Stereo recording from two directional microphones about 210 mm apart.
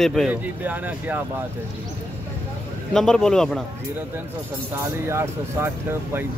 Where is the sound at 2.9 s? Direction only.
5° left (ahead or behind).